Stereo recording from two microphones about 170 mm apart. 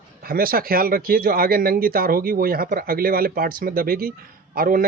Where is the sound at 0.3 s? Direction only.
60° right (ahead or behind).